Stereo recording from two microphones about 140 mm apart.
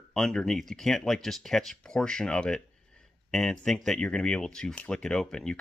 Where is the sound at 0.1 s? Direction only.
5° left (ahead or behind).